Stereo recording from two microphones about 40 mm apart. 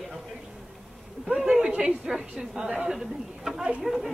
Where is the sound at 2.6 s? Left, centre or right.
Centre.